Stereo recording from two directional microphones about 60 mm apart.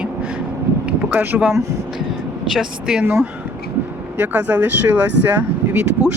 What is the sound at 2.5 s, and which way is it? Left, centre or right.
Speech, centre.